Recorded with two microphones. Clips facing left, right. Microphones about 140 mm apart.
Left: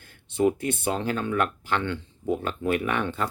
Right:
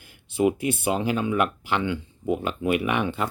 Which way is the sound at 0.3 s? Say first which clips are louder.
Right 1 dB; 10° right (ahead or behind).